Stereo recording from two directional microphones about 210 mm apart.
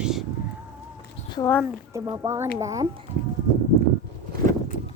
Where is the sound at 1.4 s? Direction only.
10° left (ahead or behind).